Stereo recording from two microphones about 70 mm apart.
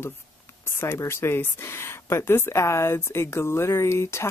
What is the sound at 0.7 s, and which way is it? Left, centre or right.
Speech, left.